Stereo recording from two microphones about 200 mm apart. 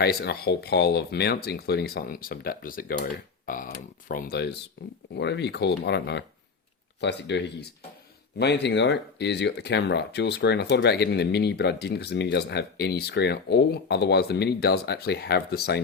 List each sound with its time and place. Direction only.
0.0 s speech: 55° left (ahead or behind)